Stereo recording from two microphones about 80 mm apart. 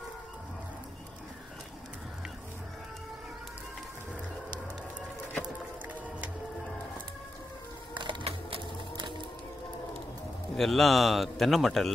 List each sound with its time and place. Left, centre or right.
7.9 s music: right
10.5 s a man's voice: centre